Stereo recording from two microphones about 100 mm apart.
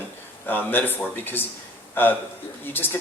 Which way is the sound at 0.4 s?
20° left (ahead or behind).